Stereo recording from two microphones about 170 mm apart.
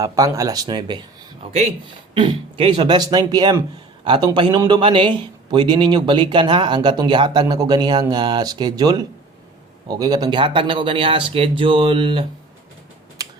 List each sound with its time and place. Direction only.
0.0 s speech: 20° right (ahead or behind)
13.2 s mechanisms: 20° right (ahead or behind)